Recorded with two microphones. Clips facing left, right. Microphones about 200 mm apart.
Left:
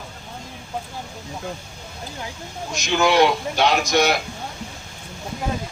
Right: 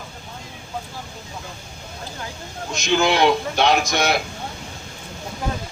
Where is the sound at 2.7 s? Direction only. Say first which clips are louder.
Left 1 dB; 55° right (ahead or behind).